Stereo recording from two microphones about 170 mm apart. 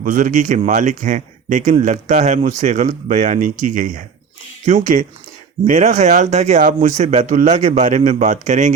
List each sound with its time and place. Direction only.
0.0 s speech: 50° right (ahead or behind)